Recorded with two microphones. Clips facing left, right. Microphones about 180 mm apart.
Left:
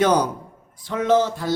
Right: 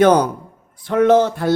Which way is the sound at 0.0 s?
55° right (ahead or behind).